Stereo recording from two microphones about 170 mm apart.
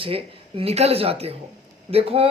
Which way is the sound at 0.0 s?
30° right (ahead or behind).